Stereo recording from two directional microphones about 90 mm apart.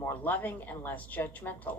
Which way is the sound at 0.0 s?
20° left (ahead or behind).